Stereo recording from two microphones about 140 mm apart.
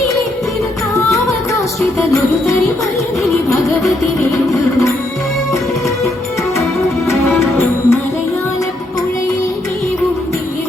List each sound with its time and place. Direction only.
2.0 s music: 20° left (ahead or behind)
7.1 s music: 20° left (ahead or behind)